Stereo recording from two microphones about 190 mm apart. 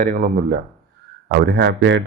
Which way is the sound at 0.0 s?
45° right (ahead or behind).